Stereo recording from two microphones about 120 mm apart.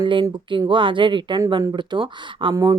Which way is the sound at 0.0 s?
45° right (ahead or behind).